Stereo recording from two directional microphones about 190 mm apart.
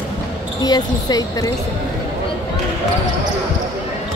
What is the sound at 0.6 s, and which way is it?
Speech, 20° left (ahead or behind).